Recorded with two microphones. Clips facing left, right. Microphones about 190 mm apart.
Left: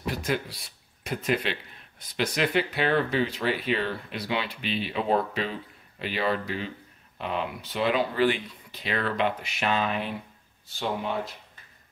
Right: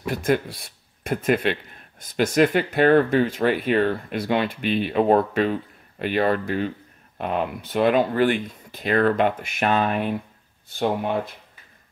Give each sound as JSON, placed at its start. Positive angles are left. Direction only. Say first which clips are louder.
{"t": 0.0, "sound": "speech", "louder": "right 7 dB", "side_deg": -50}